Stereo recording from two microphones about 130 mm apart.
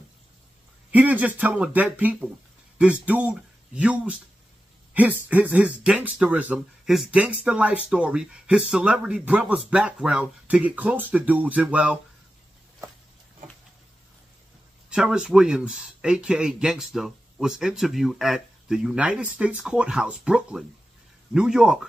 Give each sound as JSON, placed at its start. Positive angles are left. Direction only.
{"t": 0.9, "sound": "speech", "side_deg": -10}
{"t": 14.9, "sound": "speech", "side_deg": -5}